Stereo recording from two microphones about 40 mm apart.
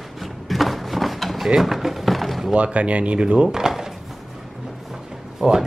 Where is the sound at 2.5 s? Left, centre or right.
Right.